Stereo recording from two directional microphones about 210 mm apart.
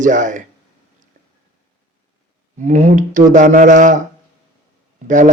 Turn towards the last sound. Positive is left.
turn(degrees=-35)  # may be behind; listen again after turning